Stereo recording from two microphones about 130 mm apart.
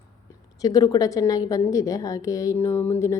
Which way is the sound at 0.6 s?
30° left (ahead or behind).